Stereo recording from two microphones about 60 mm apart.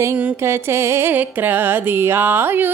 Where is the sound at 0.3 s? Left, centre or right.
Right.